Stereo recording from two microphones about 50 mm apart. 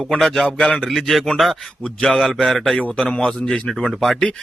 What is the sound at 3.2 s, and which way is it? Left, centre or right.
Speech, centre.